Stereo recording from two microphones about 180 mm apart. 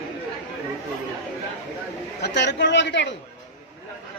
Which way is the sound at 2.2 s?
70° left (ahead or behind).